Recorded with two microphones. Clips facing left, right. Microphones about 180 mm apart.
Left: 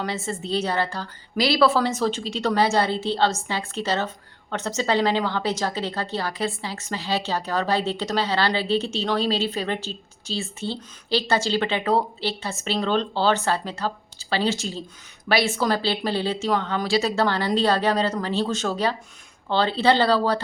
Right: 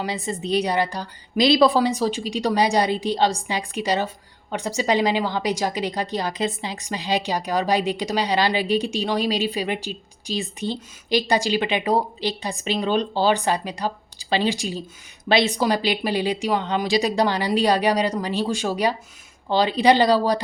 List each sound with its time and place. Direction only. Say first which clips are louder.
0.0 s speech: right 1 dB; 15° right (ahead or behind)